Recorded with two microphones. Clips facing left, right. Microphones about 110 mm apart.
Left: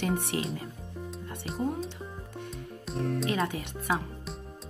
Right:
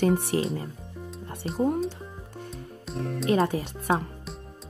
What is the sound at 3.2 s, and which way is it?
Speech, 35° right (ahead or behind).